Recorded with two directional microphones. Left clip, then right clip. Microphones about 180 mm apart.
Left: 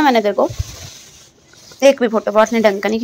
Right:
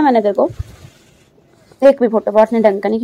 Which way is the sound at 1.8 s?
20° right (ahead or behind).